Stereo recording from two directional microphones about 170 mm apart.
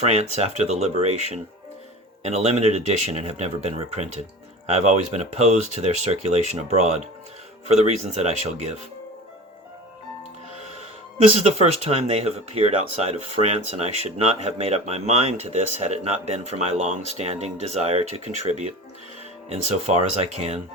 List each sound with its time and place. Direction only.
0.0 s speech: 40° right (ahead or behind)
11.3 s speech: 40° right (ahead or behind)